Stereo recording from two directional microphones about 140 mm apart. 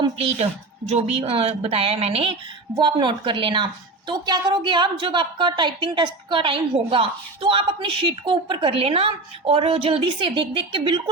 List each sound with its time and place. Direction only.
0.9 s a woman's voice: 50° right (ahead or behind)